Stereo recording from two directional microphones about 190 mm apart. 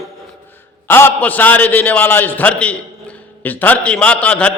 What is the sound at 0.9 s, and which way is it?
A man's voice, 10° left (ahead or behind).